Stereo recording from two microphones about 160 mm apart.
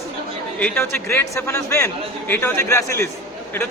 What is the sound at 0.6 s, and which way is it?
A man's voice, 15° left (ahead or behind).